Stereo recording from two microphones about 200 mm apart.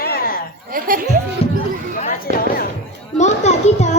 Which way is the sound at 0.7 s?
45° right (ahead or behind).